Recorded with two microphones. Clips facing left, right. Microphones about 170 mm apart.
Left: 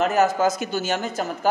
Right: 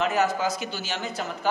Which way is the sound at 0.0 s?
45° left (ahead or behind).